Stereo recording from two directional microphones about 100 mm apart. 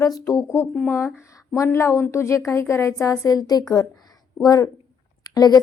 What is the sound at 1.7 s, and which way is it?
Speech, 30° left (ahead or behind).